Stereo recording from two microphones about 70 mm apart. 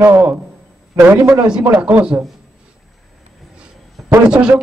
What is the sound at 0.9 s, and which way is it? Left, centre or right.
Speech, right.